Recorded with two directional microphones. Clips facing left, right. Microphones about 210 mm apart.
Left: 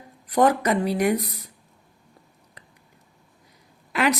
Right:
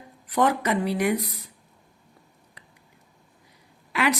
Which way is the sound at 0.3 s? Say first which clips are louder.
Left 3 dB; 40° left (ahead or behind).